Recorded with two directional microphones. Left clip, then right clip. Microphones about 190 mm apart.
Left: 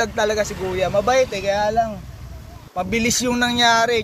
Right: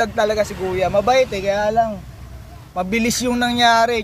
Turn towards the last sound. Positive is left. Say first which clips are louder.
# right 2 dB
turn(degrees=-15)  # may be behind; listen again after turning